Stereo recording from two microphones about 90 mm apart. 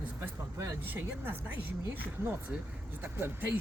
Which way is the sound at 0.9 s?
25° right (ahead or behind).